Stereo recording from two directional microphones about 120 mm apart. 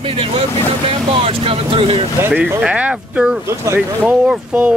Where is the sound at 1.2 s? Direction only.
50° right (ahead or behind).